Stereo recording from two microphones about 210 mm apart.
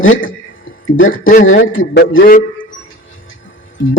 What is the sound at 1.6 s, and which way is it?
Speech, 55° left (ahead or behind).